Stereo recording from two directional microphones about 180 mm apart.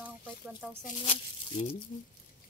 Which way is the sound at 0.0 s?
10° right (ahead or behind).